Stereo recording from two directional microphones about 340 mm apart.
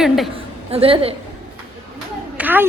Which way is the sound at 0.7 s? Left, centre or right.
Centre.